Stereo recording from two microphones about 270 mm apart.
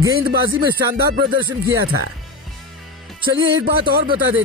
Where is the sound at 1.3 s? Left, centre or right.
Centre.